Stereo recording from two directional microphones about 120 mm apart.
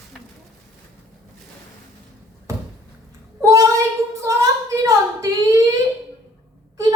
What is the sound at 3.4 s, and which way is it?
Child singing, 25° right (ahead or behind).